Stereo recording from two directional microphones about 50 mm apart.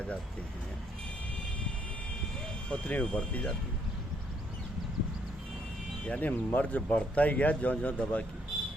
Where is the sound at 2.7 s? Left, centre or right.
Left.